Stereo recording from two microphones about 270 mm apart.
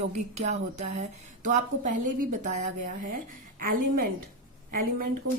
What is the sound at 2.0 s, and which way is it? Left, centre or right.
Speech, right.